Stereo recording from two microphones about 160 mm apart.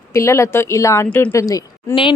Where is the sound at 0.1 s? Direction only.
20° left (ahead or behind).